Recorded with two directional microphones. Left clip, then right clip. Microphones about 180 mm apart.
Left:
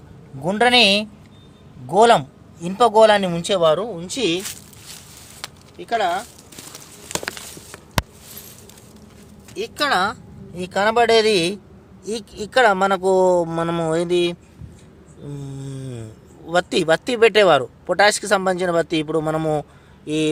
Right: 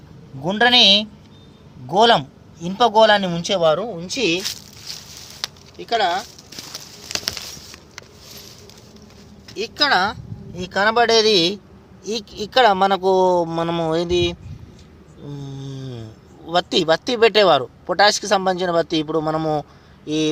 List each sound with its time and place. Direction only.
0.4 s speech: 15° left (ahead or behind)
5.7 s speech: centre (ahead or behind)
7.1 s a sound: 25° right (ahead or behind)
9.6 s speech: centre (ahead or behind)